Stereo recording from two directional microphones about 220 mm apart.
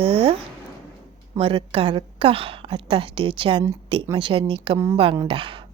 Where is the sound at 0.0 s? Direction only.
25° right (ahead or behind).